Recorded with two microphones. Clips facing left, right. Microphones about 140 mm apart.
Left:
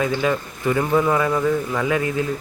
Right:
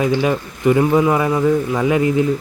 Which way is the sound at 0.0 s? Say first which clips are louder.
Right 4 dB; 20° right (ahead or behind).